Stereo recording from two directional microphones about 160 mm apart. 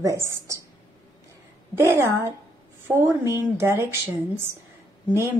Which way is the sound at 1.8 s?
15° right (ahead or behind).